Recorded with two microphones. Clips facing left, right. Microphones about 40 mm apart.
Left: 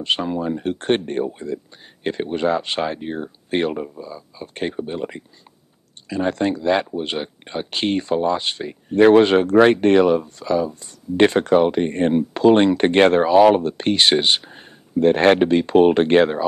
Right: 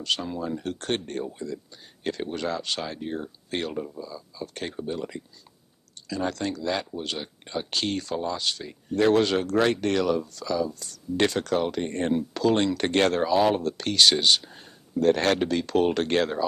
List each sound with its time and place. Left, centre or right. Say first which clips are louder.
0.0 s speech: left 7 dB; left